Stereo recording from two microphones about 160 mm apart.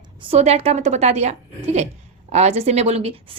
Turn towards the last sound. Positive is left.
turn(degrees=-35)  # may be behind; listen again after turning